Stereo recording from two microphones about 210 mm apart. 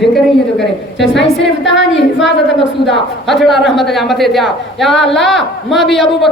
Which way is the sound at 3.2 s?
Centre (ahead or behind).